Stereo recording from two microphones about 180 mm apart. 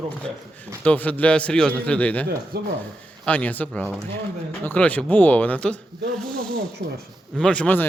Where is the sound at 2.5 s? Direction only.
60° right (ahead or behind).